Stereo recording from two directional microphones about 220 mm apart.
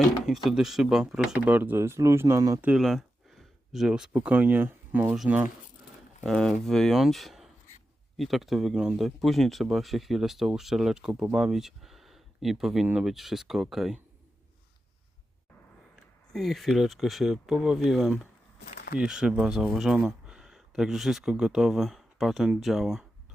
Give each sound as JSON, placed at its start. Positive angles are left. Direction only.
{"t": 0.3, "sound": "speech", "side_deg": 0}
{"t": 16.3, "sound": "speech", "side_deg": 0}